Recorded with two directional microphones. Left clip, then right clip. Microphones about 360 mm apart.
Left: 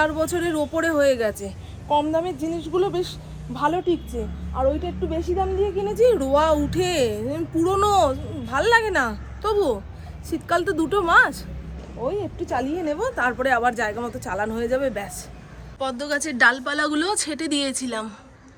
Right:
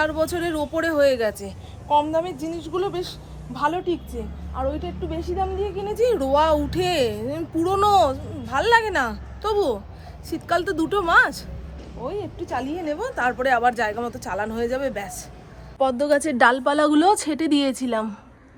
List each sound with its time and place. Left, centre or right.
0.0 s a woman's voice: centre